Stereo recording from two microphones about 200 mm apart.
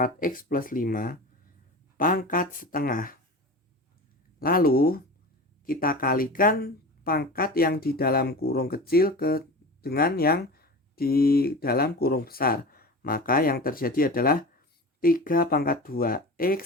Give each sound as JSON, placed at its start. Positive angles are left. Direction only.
{"t": 0.0, "sound": "speech", "side_deg": 45}
{"t": 4.4, "sound": "speech", "side_deg": 45}